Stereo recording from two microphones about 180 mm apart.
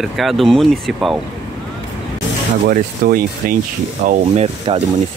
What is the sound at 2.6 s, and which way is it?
Speech, 55° right (ahead or behind).